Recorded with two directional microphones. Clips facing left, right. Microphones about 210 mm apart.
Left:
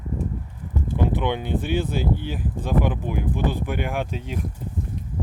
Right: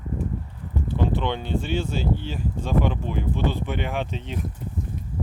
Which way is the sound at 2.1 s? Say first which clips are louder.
Left 1 dB; 15° left (ahead or behind).